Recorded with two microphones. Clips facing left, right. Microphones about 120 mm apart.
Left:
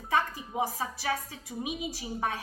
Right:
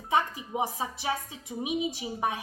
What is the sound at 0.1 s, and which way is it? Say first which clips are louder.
A woman's voice: right 2 dB; 20° right (ahead or behind).